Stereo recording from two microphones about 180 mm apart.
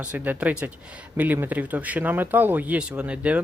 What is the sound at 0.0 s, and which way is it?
Speech, 5° right (ahead or behind).